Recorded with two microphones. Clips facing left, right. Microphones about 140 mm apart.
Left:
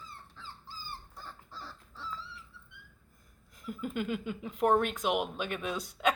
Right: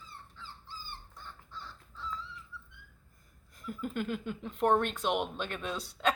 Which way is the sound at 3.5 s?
5° left (ahead or behind).